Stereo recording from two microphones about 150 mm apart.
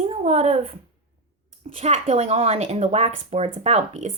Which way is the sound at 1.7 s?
40° right (ahead or behind).